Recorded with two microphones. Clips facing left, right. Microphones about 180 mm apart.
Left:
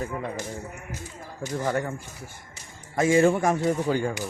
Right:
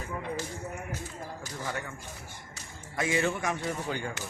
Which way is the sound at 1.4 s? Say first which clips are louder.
Left 12 dB; 45° left (ahead or behind).